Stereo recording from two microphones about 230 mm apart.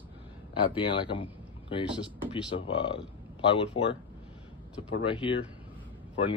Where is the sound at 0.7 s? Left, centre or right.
Left.